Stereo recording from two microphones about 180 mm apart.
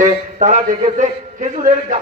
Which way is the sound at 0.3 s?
45° right (ahead or behind).